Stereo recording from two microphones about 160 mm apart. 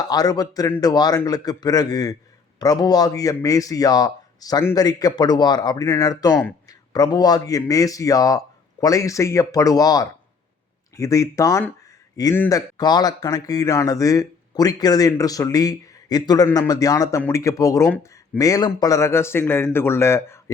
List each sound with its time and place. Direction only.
0.1 s a man's voice: 25° left (ahead or behind)